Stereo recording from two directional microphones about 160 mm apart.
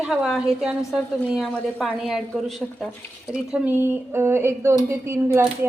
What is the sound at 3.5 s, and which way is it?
Speech, 10° right (ahead or behind).